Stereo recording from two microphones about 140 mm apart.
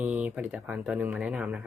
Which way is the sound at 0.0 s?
10° right (ahead or behind).